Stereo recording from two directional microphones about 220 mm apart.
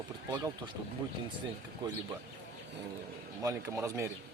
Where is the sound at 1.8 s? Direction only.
20° right (ahead or behind).